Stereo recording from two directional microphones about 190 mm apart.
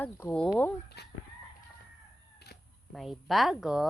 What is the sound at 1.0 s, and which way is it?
Speech, 60° left (ahead or behind).